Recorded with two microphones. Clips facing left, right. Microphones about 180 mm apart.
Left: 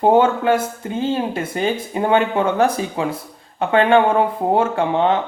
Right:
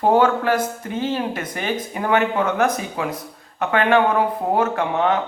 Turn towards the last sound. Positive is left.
turn(degrees=25)  # may be behind; listen again after turning